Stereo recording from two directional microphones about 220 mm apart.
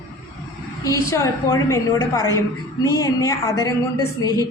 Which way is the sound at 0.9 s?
15° left (ahead or behind).